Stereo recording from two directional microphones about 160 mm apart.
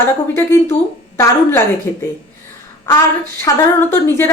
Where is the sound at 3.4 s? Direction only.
15° left (ahead or behind).